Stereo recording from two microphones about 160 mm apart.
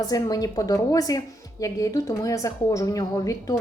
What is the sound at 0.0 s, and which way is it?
A woman's voice, 25° left (ahead or behind).